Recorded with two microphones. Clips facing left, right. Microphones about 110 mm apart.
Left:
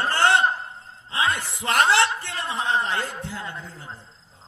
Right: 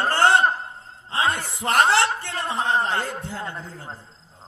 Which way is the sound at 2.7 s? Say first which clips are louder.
Right 1 dB; 30° right (ahead or behind).